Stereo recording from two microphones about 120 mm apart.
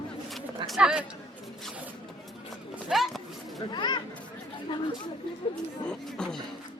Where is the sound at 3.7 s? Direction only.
40° left (ahead or behind).